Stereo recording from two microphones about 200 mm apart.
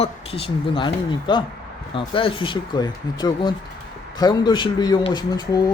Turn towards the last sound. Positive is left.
turn(degrees=20)  # may be behind; listen again after turning